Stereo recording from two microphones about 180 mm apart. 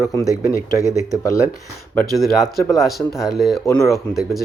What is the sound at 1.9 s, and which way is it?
Speech, centre (ahead or behind).